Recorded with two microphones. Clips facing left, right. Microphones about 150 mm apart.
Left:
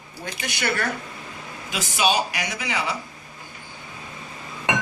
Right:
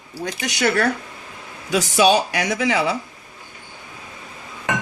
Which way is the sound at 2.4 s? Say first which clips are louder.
Right 8 dB; 90° right.